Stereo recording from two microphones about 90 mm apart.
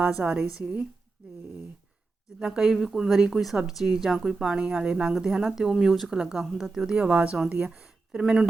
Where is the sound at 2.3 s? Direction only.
10° right (ahead or behind).